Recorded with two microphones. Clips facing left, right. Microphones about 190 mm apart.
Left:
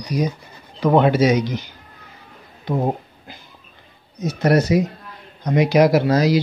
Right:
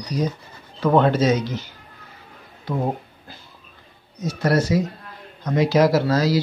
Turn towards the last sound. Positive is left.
turn(degrees=15)  # may be behind; listen again after turning